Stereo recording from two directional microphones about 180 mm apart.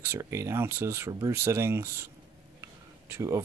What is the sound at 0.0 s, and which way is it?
Speech, 15° right (ahead or behind).